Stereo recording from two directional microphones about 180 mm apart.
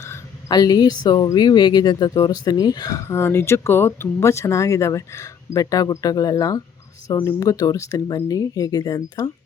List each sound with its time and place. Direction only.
0.0 s a woman's voice: 15° left (ahead or behind)